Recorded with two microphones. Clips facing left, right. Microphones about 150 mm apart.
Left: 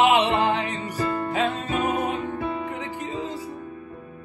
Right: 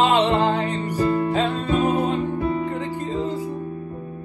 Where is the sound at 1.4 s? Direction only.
15° left (ahead or behind).